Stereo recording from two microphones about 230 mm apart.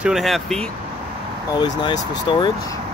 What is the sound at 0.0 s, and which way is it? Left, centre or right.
Speech, centre.